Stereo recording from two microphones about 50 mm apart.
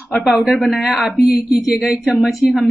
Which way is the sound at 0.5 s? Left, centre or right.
Centre.